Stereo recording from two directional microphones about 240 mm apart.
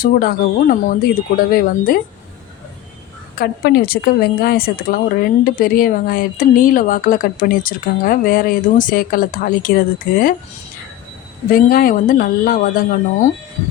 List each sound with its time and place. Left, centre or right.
0.0 s speech: left
3.3 s speech: left
11.5 s speech: left